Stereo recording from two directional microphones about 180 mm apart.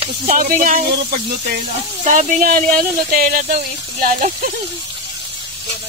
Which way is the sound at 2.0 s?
40° right (ahead or behind).